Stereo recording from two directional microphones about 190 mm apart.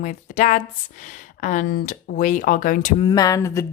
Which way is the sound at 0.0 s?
40° left (ahead or behind).